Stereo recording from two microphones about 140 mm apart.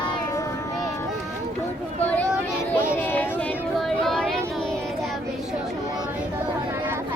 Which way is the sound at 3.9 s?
5° left (ahead or behind).